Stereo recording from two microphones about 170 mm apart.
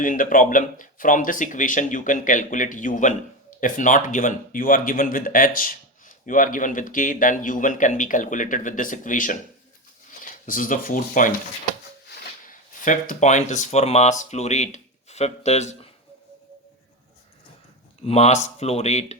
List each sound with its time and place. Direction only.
0.0 s speech: 50° left (ahead or behind)
10.4 s speech: 55° left (ahead or behind)
12.5 s speech: 50° left (ahead or behind)
18.0 s speech: 40° left (ahead or behind)